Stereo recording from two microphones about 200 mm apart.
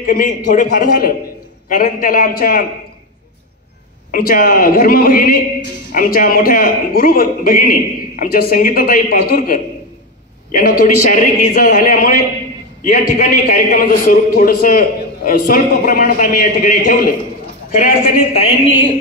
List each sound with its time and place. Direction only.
0.0 s a man's voice: 45° left (ahead or behind)
4.1 s a man's voice: 45° left (ahead or behind)
18.4 s speech: 30° left (ahead or behind)